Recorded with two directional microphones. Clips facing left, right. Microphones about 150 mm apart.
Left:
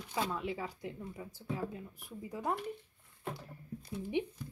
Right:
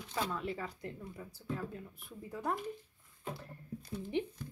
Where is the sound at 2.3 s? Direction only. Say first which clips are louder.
Left 1 dB; 15° left (ahead or behind).